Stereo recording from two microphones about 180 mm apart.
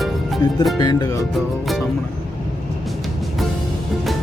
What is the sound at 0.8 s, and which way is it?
Music, 20° left (ahead or behind).